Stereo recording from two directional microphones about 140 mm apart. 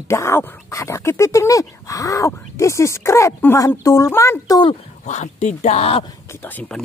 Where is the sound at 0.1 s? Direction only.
20° left (ahead or behind).